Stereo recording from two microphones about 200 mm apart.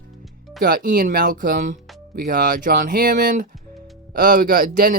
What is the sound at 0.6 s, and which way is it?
Speech, 50° right (ahead or behind).